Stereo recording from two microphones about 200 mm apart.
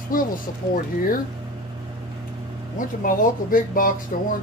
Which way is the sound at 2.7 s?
45° left (ahead or behind).